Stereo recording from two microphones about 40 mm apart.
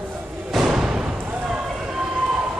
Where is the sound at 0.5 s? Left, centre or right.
Centre.